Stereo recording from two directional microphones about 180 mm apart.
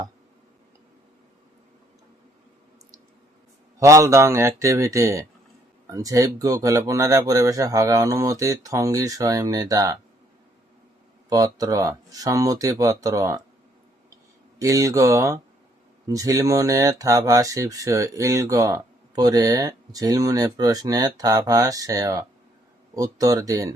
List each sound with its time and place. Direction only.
3.8 s speech: 15° right (ahead or behind)
11.3 s speech: 20° right (ahead or behind)
14.6 s speech: 20° right (ahead or behind)